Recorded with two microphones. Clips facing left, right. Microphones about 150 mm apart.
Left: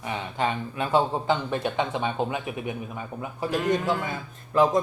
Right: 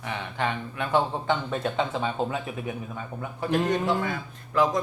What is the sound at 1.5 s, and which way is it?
Speech, 5° left (ahead or behind).